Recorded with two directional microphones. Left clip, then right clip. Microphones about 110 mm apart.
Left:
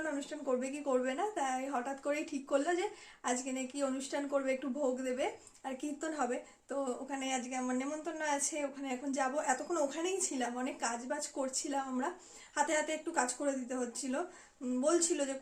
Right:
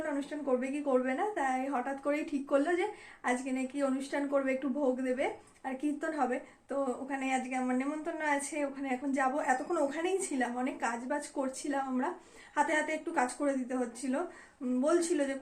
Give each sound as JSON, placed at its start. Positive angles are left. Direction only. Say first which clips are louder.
{"t": 0.3, "sound": "a woman's voice", "louder": "right 3 dB", "side_deg": 35}
{"t": 7.5, "sound": "a woman's voice", "louder": "right 3 dB", "side_deg": 20}